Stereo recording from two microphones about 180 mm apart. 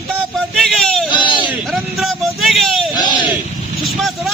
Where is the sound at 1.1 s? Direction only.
25° left (ahead or behind).